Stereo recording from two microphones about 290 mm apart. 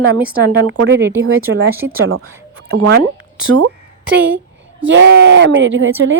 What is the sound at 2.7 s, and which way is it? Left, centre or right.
Speech, right.